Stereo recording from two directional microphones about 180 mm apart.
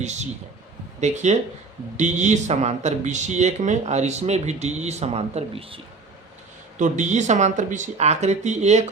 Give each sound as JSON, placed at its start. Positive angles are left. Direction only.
{"t": 0.0, "sound": "a man's voice", "side_deg": -40}
{"t": 6.7, "sound": "speech", "side_deg": -45}